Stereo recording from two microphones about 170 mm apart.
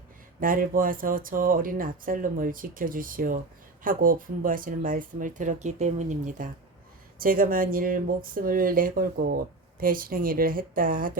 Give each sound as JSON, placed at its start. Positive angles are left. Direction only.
{"t": 0.3, "sound": "speech", "side_deg": -55}